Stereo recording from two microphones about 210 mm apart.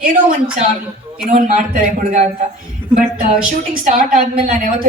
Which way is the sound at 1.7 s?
35° right (ahead or behind).